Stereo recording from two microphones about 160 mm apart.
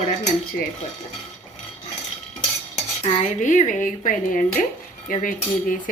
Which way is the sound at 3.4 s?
50° left (ahead or behind).